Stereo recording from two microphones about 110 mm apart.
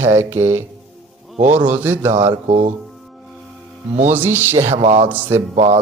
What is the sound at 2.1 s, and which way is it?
Speech, 75° right (ahead or behind).